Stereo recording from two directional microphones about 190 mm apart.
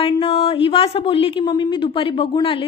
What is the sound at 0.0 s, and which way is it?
Speech, 30° left (ahead or behind).